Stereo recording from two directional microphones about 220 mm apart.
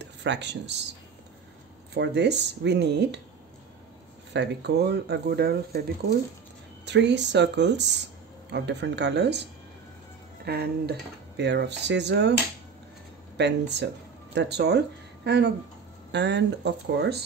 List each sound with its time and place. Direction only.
0.0 s speech: 50° right (ahead or behind)
2.0 s speech: 50° right (ahead or behind)
4.3 s speech: 50° right (ahead or behind)
6.9 s speech: 50° right (ahead or behind)
13.4 s speech: 50° right (ahead or behind)